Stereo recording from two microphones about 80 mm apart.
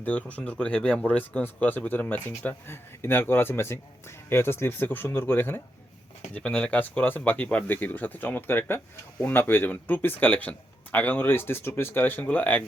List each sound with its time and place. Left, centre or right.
0.0 s speech: centre
6.3 s speech: centre